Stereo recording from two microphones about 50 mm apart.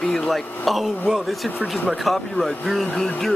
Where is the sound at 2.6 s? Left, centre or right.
Centre.